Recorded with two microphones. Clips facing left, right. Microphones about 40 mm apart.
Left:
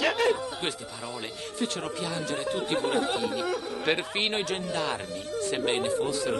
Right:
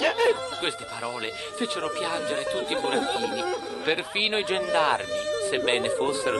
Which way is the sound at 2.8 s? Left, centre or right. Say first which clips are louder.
Right 2 dB; right.